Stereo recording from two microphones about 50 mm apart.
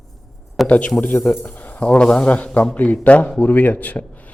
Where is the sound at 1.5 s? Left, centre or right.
Left.